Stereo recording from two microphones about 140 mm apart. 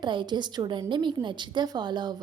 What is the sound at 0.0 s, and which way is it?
A woman's voice, 35° right (ahead or behind).